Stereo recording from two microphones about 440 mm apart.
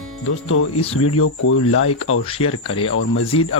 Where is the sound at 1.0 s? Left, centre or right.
Left.